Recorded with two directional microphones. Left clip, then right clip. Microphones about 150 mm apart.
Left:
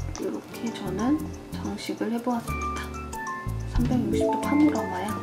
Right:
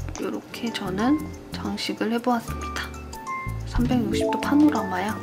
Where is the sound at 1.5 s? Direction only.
25° right (ahead or behind).